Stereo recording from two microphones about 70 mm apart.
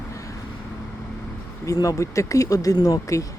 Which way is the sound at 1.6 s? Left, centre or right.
Left.